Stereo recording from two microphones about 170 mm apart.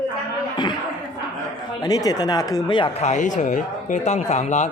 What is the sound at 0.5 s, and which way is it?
Speech, 25° left (ahead or behind).